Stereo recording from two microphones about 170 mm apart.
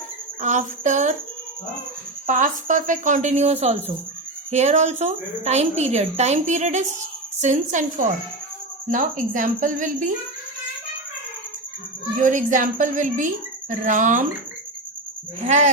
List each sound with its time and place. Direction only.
0.4 s a woman's voice: 45° right (ahead or behind)
2.2 s a woman's voice: 50° right (ahead or behind)
8.9 s a woman's voice: 50° right (ahead or behind)
12.2 s a woman's voice: 50° right (ahead or behind)
15.4 s a woman's voice: 45° right (ahead or behind)